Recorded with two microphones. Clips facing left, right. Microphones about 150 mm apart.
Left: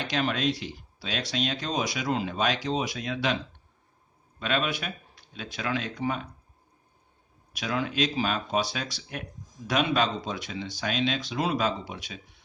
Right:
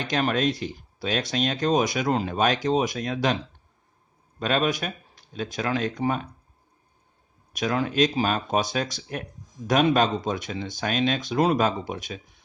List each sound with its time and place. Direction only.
0.0 s speech: 45° right (ahead or behind)
4.4 s speech: 40° right (ahead or behind)
7.5 s speech: 45° right (ahead or behind)